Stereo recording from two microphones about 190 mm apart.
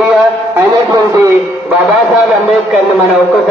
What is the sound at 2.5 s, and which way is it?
Speech, centre (ahead or behind).